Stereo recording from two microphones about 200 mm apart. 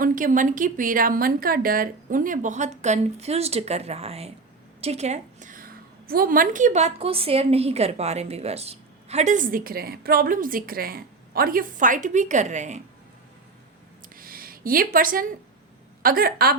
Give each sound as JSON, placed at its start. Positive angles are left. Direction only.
{"t": 0.0, "sound": "a woman's voice", "side_deg": -40}
{"t": 14.2, "sound": "a sound", "side_deg": -45}
{"t": 16.0, "sound": "speech", "side_deg": -45}